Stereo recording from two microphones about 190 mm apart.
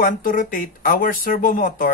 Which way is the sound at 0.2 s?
45° left (ahead or behind).